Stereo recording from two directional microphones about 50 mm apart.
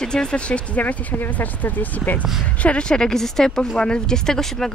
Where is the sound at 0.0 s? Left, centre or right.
Centre.